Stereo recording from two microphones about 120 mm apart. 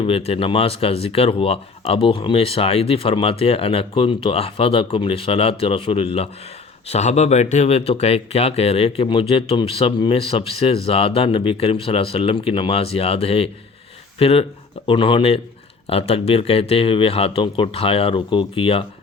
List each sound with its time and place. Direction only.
0.0 s speech: 55° left (ahead or behind)
6.8 s speech: 65° left (ahead or behind); by 18.9 s 45° left (ahead or behind)